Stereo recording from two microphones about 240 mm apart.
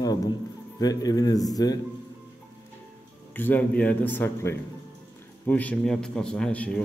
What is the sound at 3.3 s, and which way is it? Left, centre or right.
A man's voice, centre.